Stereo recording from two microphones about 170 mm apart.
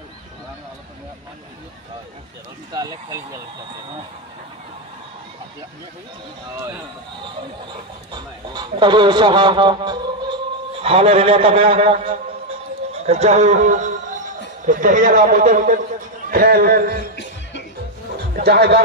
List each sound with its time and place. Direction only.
2.7 s a man's voice: 20° right (ahead or behind)
8.1 s a man's voice: 25° right (ahead or behind)
12.9 s music: 40° right (ahead or behind)
14.7 s a man's voice: 50° right (ahead or behind)
17.2 s music: 90° left
18.1 s music: 70° right (ahead or behind)